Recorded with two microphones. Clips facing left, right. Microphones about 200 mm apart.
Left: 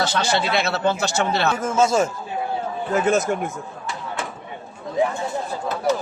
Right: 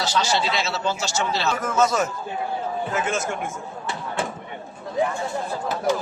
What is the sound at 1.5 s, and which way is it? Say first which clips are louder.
Speech: left 2 dB; 25° left (ahead or behind).